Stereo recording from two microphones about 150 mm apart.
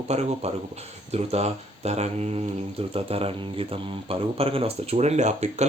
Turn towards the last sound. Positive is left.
turn(degrees=-50)  # may be behind; listen again after turning